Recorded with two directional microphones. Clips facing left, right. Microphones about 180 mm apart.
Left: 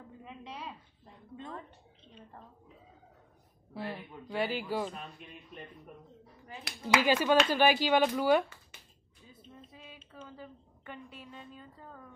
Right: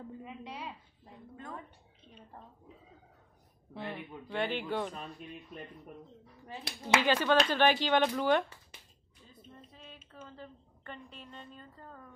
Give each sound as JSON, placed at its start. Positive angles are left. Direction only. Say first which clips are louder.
{"t": 0.2, "sound": "a sound", "louder": "right 1 dB", "side_deg": 0}
{"t": 3.8, "sound": "speech", "louder": "even", "side_deg": -15}
{"t": 4.3, "sound": "a woman's voice", "louder": "left 1 dB", "side_deg": 5}
{"t": 6.4, "sound": "speech", "louder": "left 1 dB", "side_deg": -30}
{"t": 7.0, "sound": "a woman's voice", "louder": "left 2 dB", "side_deg": 10}
{"t": 9.3, "sound": "music", "louder": "left 1 dB", "side_deg": 5}
{"t": 10.2, "sound": "a woman's voice", "louder": "left 1 dB", "side_deg": 5}